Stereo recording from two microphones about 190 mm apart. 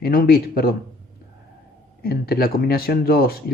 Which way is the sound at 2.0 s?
55° left (ahead or behind).